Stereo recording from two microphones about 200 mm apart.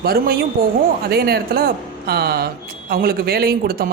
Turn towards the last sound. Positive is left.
turn(degrees=-50)  # may be behind; listen again after turning